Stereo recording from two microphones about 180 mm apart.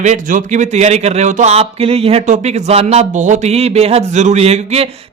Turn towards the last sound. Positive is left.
turn(degrees=-35)  # may be behind; listen again after turning